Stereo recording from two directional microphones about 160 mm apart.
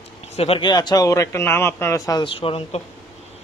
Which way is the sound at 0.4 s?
35° left (ahead or behind).